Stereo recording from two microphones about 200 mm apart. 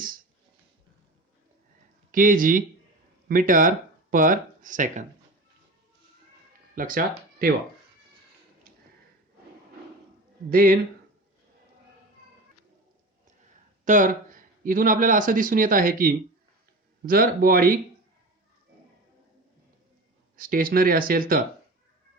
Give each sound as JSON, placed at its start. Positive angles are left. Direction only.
{"t": 2.1, "sound": "speech", "side_deg": -40}
{"t": 6.7, "sound": "speech", "side_deg": -45}
{"t": 10.5, "sound": "speech", "side_deg": -45}
{"t": 13.8, "sound": "speech", "side_deg": -40}
{"t": 20.3, "sound": "speech", "side_deg": -45}